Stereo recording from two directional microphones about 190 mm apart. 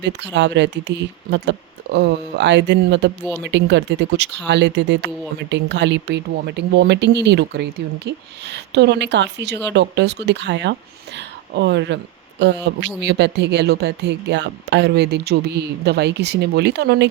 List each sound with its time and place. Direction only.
0.0 s speech: 65° right (ahead or behind)
3.2 s speech: 5° right (ahead or behind)
3.5 s speech: 65° right (ahead or behind)
11.2 s a sound: 65° right (ahead or behind)
12.4 s speech: 65° right (ahead or behind)